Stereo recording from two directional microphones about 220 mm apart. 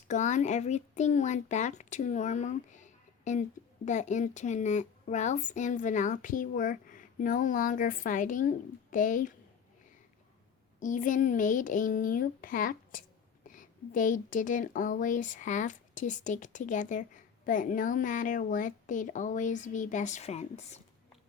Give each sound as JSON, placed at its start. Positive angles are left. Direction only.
{"t": 0.1, "sound": "speech", "side_deg": 35}
{"t": 10.8, "sound": "speech", "side_deg": 35}